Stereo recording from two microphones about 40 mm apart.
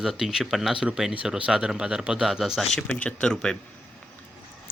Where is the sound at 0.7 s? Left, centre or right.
Centre.